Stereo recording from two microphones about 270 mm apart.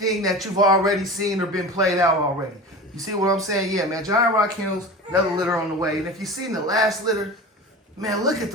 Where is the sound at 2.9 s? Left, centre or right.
Centre.